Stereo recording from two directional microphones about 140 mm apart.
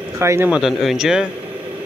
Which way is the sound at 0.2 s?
20° right (ahead or behind).